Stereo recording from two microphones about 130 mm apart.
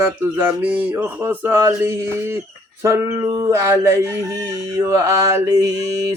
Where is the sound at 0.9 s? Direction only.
15° right (ahead or behind).